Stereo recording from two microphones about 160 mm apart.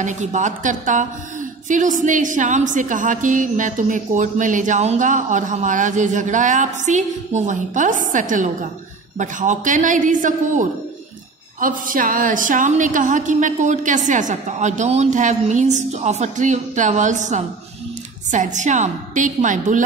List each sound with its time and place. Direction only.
0.0 s a woman's voice: 50° right (ahead or behind)